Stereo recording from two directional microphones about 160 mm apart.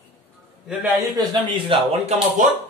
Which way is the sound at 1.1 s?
30° right (ahead or behind).